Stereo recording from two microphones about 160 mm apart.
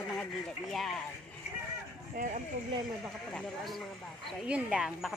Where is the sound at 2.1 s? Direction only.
55° right (ahead or behind).